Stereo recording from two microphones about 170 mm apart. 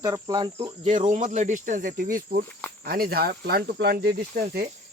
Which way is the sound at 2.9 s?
65° right (ahead or behind).